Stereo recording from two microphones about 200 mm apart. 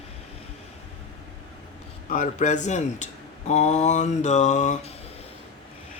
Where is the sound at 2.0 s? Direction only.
40° left (ahead or behind).